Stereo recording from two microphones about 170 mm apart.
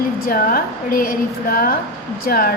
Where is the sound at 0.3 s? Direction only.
60° left (ahead or behind).